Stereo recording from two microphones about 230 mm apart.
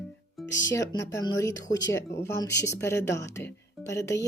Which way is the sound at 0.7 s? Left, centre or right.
Centre.